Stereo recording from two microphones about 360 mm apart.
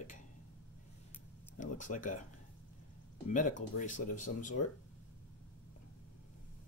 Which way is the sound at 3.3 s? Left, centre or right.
Left.